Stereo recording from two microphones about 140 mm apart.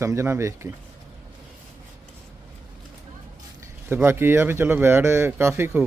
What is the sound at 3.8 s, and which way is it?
A man's voice, 15° right (ahead or behind).